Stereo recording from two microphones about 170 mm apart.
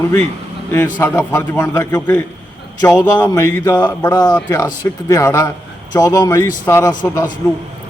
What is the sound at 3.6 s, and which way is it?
A man's voice, 25° left (ahead or behind).